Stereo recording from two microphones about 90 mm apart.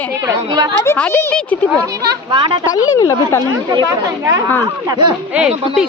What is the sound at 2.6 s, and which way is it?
Speech, 40° left (ahead or behind).